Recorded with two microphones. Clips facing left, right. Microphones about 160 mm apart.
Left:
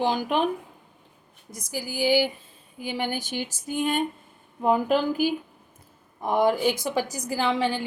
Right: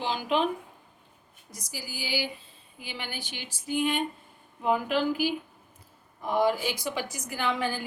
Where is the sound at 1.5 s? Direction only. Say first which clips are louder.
Left 8 dB; 50° left (ahead or behind).